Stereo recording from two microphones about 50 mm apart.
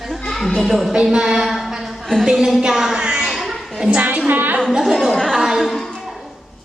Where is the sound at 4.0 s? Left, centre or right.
Right.